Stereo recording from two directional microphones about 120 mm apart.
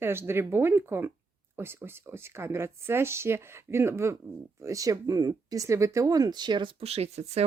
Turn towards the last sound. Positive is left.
turn(degrees=-60)  # may be behind; listen again after turning